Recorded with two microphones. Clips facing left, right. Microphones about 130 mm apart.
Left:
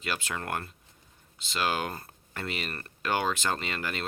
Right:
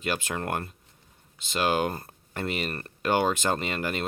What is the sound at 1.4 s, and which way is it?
Speech, 50° right (ahead or behind).